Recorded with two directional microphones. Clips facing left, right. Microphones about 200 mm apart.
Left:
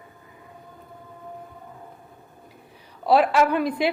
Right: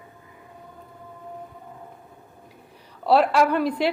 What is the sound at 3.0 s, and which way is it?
Speech, 10° left (ahead or behind).